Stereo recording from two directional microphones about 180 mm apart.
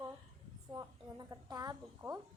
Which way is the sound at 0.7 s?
20° right (ahead or behind).